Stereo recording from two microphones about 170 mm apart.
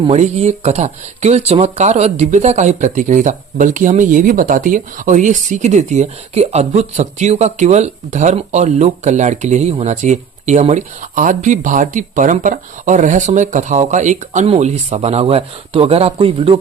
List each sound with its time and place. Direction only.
0.0 s speech: 35° right (ahead or behind)